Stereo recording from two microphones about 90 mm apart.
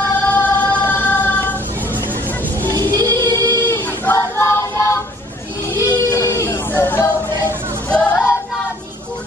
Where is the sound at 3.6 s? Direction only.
20° left (ahead or behind).